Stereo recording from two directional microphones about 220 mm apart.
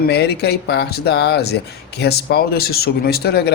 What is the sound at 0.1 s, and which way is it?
Speech, 50° left (ahead or behind).